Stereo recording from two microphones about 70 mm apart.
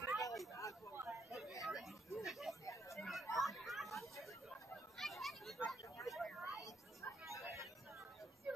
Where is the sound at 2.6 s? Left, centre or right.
Left.